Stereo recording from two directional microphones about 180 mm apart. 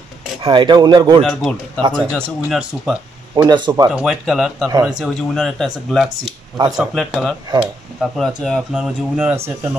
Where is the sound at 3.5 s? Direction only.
20° right (ahead or behind).